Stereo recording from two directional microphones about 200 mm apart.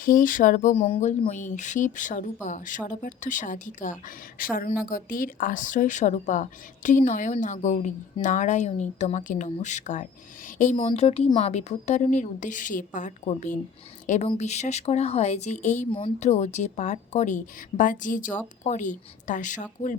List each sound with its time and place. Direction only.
0.0 s a woman's voice: 45° left (ahead or behind)
15.9 s speech: 25° left (ahead or behind)